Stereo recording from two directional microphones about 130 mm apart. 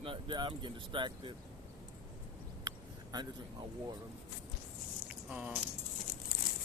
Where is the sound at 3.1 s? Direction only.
30° right (ahead or behind).